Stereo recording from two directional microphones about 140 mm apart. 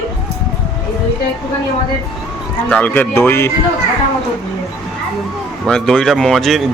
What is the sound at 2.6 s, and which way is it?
Speech, 10° left (ahead or behind).